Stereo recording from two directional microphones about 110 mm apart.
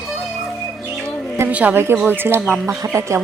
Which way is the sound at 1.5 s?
15° right (ahead or behind).